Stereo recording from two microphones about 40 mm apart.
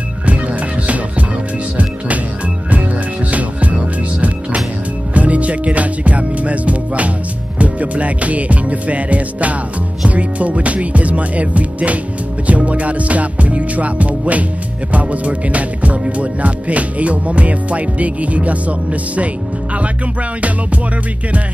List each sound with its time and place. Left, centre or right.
0.2 s music: right
3.3 s music: right
5.1 s music: right